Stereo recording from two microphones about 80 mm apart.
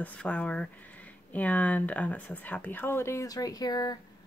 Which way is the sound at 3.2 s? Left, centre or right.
Left.